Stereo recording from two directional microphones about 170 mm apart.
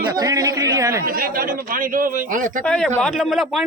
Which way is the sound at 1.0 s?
60° right (ahead or behind).